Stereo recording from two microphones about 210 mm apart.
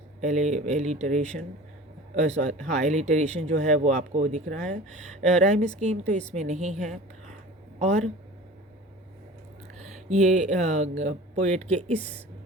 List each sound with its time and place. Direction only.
0.2 s speech: 35° right (ahead or behind)
10.3 s speech: 35° right (ahead or behind)